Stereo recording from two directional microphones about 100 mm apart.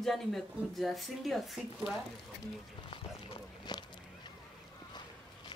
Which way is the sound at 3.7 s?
45° left (ahead or behind).